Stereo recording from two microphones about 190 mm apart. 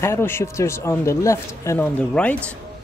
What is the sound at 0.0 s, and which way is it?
Speech, 15° left (ahead or behind).